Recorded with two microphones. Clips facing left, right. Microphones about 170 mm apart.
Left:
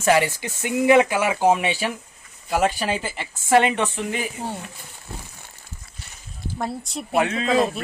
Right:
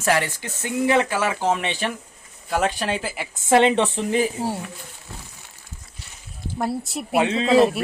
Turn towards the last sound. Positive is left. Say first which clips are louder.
# right 2 dB
turn(degrees=-25)  # may be behind; listen again after turning